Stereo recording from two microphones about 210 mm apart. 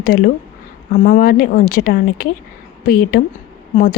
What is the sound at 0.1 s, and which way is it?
A woman's voice, 45° left (ahead or behind).